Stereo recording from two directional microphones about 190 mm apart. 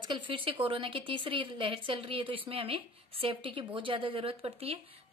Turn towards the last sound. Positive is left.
turn(degrees=-30)  # may be behind; listen again after turning